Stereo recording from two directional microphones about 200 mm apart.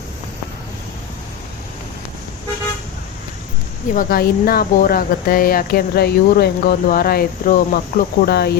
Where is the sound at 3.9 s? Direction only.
45° left (ahead or behind).